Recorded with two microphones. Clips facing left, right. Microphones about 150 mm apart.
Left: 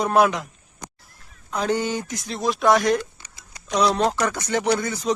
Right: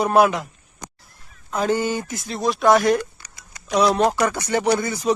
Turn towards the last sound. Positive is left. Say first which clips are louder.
# right 2 dB
turn(degrees=-10)  # may be behind; listen again after turning